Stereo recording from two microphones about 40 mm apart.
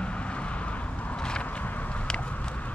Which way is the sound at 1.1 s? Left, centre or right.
Left.